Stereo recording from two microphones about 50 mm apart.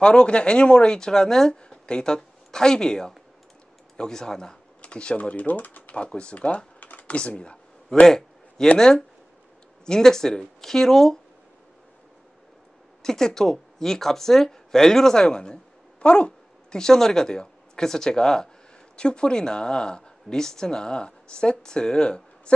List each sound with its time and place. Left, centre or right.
0.0 s speech: centre
7.9 s a sound: centre
8.7 s speech: centre
13.0 s speech: centre